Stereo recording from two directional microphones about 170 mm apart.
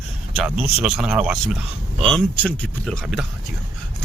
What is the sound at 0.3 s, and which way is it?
Speech, 5° right (ahead or behind).